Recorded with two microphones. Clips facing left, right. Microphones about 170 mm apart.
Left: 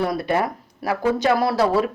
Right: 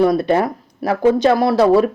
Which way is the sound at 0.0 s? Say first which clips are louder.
Right 7 dB; 25° right (ahead or behind).